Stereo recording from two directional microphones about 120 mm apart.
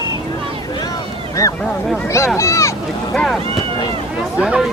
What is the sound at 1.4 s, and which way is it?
Speech, 25° left (ahead or behind).